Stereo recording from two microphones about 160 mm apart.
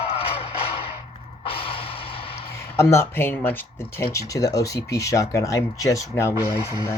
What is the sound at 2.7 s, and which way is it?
Speech, 15° left (ahead or behind).